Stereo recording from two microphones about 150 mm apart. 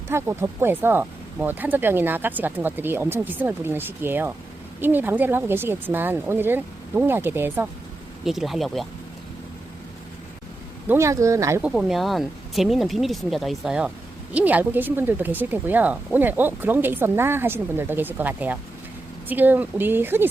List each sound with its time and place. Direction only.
0.1 s speech: 15° right (ahead or behind)
8.2 s speech: centre (ahead or behind)
10.8 s speech: 20° right (ahead or behind)
11.6 s speech: centre (ahead or behind)